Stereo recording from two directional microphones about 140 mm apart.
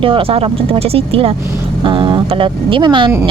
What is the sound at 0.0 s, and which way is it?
Speech, 40° right (ahead or behind).